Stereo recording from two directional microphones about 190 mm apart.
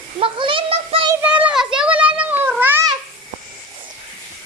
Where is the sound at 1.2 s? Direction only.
10° right (ahead or behind).